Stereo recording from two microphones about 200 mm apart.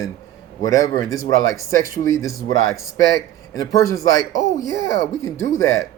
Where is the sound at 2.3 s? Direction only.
90° left.